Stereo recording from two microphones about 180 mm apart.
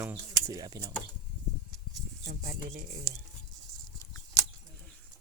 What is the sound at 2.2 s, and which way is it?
Speech, 60° right (ahead or behind).